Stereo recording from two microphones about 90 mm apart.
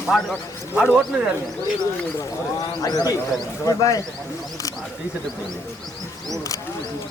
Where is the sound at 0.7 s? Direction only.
20° right (ahead or behind).